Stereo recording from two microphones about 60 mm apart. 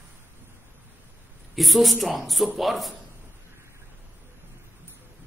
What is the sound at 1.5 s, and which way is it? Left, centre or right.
A man's voice, centre.